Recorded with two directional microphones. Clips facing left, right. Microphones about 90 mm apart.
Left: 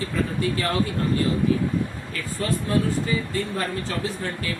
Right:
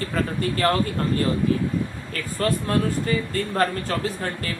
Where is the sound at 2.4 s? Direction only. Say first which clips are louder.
Right 1 dB; 55° right (ahead or behind).